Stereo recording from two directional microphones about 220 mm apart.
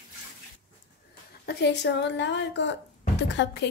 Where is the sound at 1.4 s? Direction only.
50° left (ahead or behind).